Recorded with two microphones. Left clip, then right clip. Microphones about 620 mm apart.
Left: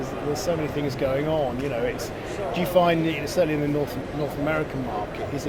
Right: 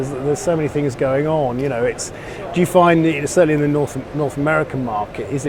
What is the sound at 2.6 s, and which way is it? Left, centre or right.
Speech, right.